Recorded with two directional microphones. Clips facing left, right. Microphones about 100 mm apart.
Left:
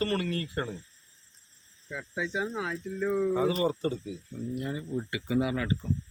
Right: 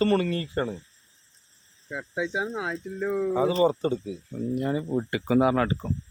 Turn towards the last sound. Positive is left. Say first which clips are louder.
# right 7 dB
turn(degrees=-55)  # may be behind; listen again after turning